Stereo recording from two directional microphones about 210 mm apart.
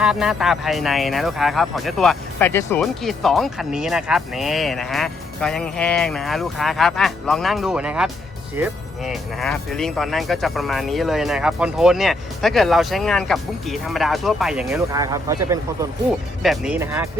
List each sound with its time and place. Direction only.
0.0 s speech: 5° right (ahead or behind)
14.9 s speech: 15° right (ahead or behind)
16.4 s speech: centre (ahead or behind)